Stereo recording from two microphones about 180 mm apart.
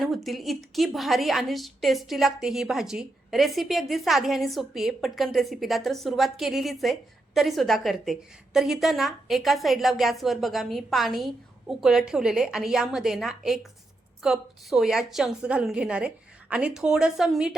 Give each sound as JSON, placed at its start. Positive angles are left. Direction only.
{"t": 0.0, "sound": "a woman's voice", "side_deg": 0}